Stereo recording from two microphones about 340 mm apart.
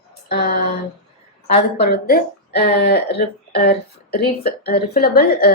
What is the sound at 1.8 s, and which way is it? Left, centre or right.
Speech, left.